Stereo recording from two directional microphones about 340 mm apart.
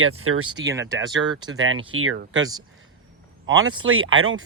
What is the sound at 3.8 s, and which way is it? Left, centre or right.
Speech, right.